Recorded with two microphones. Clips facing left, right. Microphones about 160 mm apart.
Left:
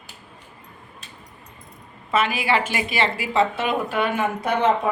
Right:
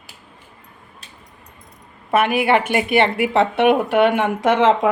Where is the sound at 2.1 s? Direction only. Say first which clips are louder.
Right 5 dB; 60° right (ahead or behind).